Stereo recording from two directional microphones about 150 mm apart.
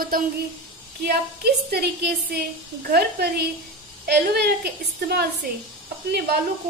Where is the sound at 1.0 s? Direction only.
90° right.